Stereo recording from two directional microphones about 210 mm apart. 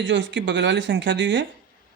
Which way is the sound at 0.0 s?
60° right (ahead or behind).